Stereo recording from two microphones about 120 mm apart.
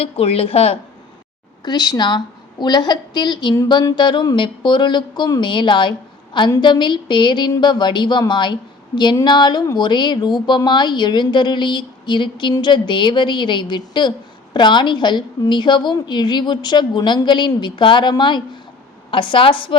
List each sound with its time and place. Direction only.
0.0 s speech: 55° left (ahead or behind)
1.6 s a woman's voice: 35° left (ahead or behind)